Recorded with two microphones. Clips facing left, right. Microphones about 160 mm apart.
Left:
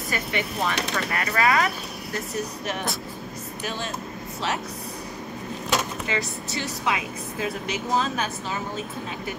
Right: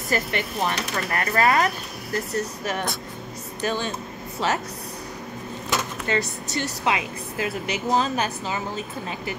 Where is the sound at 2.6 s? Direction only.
Centre (ahead or behind).